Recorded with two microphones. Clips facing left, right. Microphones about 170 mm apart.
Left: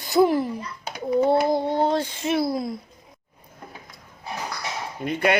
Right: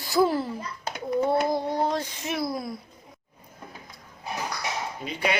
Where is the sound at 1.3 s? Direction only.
30° left (ahead or behind).